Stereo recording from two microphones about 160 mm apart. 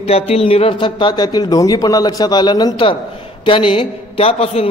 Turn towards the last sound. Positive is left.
turn(degrees=35)  # may be behind; listen again after turning